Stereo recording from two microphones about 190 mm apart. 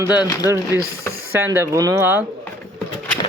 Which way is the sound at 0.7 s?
10° right (ahead or behind).